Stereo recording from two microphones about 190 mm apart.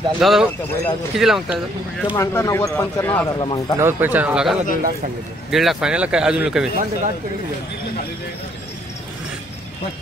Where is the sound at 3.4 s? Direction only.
25° left (ahead or behind).